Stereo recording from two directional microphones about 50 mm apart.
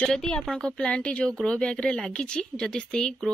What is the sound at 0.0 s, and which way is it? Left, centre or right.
A woman's voice, centre.